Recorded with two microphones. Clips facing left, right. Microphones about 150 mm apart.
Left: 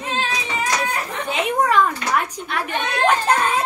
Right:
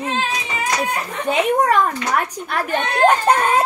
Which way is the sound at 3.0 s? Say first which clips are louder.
Right 3 dB; 45° right (ahead or behind).